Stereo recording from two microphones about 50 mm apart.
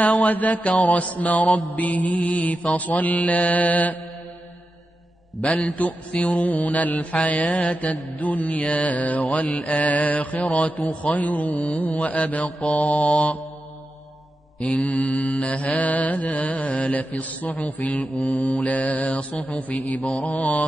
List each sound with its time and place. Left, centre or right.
0.0 s mantra: left
5.4 s mantra: left
14.6 s mantra: left